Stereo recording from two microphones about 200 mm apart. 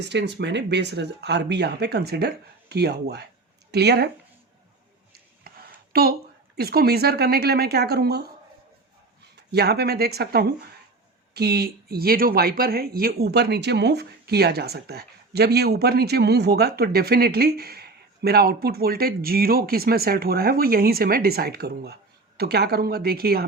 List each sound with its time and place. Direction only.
0.0 s speech: 60° right (ahead or behind)
5.4 s a sound: 50° right (ahead or behind)
6.6 s speech: 50° right (ahead or behind)
9.3 s speech: 55° right (ahead or behind)